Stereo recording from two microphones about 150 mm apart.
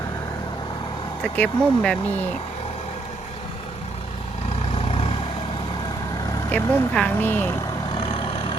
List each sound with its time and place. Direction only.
1.2 s speech: 5° left (ahead or behind)
4.9 s vehicle: 45° left (ahead or behind)
6.5 s speech: 10° left (ahead or behind)
7.9 s vehicle: 35° left (ahead or behind)